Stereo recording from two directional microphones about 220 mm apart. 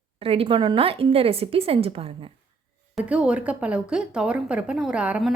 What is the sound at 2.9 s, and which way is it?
A woman's voice, 5° right (ahead or behind).